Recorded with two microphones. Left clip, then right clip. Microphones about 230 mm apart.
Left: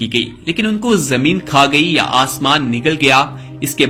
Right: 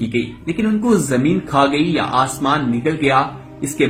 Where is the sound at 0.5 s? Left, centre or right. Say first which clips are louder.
Left 2 dB; left.